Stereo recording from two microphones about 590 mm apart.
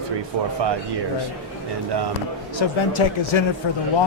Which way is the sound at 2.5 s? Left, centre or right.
Left.